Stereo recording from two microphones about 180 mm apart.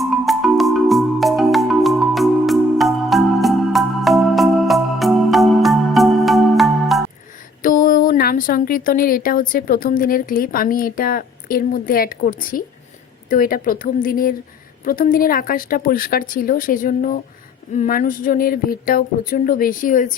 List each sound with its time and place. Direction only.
0.0 s music: centre (ahead or behind)
7.6 s speech: 50° left (ahead or behind)